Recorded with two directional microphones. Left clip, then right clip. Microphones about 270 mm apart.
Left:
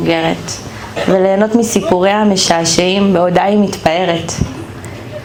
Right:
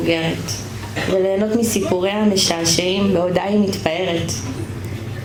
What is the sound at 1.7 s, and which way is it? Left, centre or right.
Speech, left.